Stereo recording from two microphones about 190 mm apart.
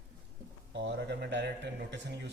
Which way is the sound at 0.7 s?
65° right (ahead or behind).